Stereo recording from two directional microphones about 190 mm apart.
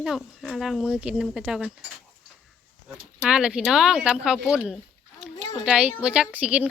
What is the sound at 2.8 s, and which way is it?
Speech, 5° right (ahead or behind).